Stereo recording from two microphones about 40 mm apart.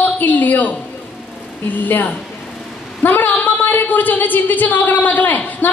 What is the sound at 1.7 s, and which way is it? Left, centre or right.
A woman's voice, left.